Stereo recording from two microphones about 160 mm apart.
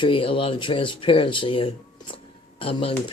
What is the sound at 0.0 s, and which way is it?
Speech, 35° left (ahead or behind).